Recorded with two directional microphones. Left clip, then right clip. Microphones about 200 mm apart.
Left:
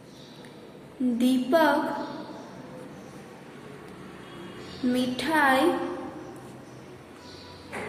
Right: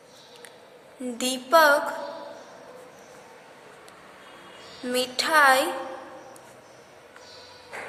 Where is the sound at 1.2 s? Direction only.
40° right (ahead or behind).